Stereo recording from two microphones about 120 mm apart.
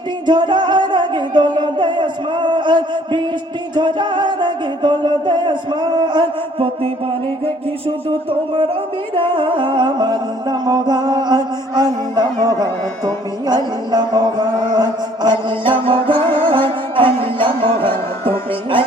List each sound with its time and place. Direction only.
0.3 s music: 40° right (ahead or behind)
1.5 s a sound: 40° right (ahead or behind)
3.8 s music: 40° right (ahead or behind)
8.3 s music: 50° right (ahead or behind); by 12.5 s 35° right (ahead or behind)
13.5 s chant: 35° right (ahead or behind)